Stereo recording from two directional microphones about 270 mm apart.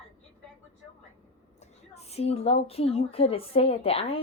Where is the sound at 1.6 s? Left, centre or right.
Left.